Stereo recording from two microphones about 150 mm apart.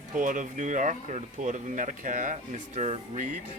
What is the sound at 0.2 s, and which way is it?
Speech, 60° right (ahead or behind).